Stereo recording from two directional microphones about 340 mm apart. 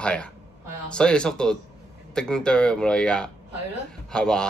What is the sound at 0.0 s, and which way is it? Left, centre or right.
A man's voice, centre.